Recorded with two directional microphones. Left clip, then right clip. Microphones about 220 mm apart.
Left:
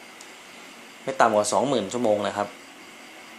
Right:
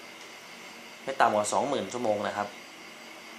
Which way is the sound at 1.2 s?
35° left (ahead or behind).